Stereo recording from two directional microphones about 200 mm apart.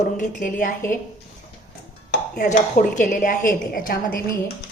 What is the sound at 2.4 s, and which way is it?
Speech, 40° left (ahead or behind).